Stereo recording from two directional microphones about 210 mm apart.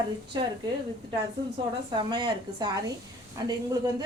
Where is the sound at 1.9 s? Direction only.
20° right (ahead or behind).